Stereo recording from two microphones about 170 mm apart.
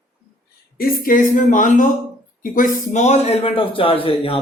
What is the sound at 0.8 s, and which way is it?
A man's voice, 55° left (ahead or behind).